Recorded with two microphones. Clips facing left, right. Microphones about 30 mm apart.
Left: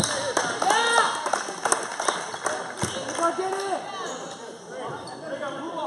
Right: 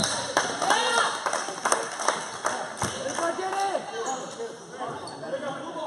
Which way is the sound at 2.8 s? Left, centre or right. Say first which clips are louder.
Left 4 dB; centre.